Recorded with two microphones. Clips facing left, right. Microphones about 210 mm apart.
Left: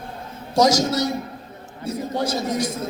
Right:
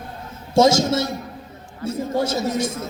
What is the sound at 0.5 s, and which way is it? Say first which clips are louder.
A man's voice: right 2 dB; 25° right (ahead or behind).